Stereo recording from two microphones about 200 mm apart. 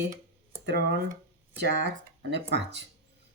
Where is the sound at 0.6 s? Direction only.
60° right (ahead or behind).